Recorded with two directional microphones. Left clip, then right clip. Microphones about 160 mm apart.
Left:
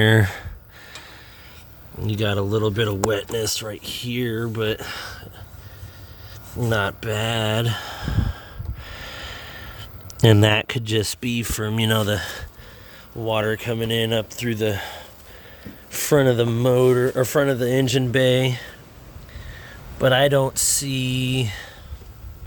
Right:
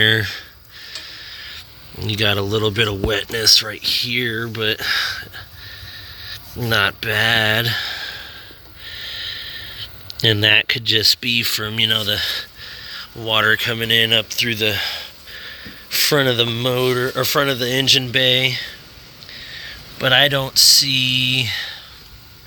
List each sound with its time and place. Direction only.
0.0 s speech: 40° left (ahead or behind)
1.1 s stir: 25° left (ahead or behind)
2.0 s speech: 5° left (ahead or behind)
6.6 s speech: 5° left (ahead or behind)
7.8 s a sound: 35° left (ahead or behind)
10.1 s speech: 45° left (ahead or behind); by 11.8 s 25° left (ahead or behind)
11.8 s speech: 35° left (ahead or behind)
13.1 s speech: 15° left (ahead or behind); by 18.7 s 40° left (ahead or behind)
20.0 s speech: 35° left (ahead or behind)